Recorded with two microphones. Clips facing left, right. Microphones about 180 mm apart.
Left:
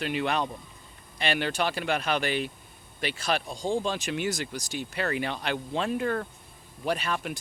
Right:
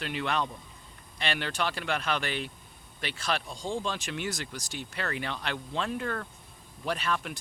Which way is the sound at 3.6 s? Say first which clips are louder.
Left 5 dB; 40° left (ahead or behind).